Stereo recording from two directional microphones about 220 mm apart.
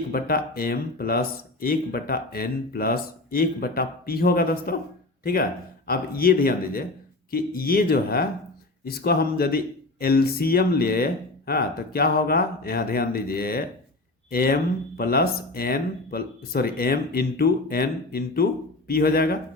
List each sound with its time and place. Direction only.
0.1 s speech: 40° left (ahead or behind)